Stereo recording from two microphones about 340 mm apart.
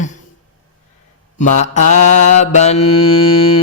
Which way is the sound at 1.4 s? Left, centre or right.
Left.